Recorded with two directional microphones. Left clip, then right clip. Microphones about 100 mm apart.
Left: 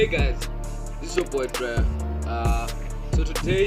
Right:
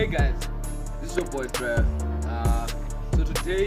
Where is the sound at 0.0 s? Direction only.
40° right (ahead or behind).